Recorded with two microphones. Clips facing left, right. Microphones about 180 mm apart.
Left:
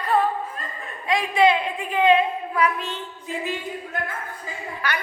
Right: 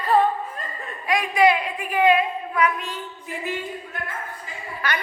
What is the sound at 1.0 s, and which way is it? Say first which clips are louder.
A woman's voice: even; 25° left (ahead or behind).